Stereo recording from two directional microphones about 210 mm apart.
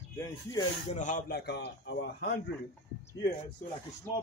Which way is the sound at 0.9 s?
35° left (ahead or behind).